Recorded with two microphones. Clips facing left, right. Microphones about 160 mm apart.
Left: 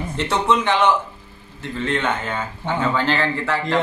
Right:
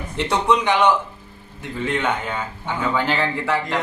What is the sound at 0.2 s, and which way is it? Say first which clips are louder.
A man's voice: right 1 dB; 15° right (ahead or behind).